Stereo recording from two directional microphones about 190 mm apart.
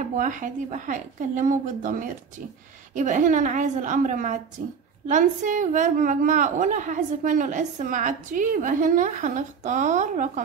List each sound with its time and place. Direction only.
0.2 s a woman's voice: 45° right (ahead or behind)